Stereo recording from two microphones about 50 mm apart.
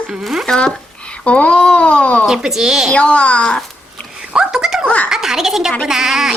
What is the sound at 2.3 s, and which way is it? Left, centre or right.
Speech, centre.